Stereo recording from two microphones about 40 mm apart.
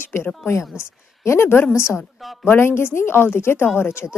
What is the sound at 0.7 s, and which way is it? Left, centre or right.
Speech, centre.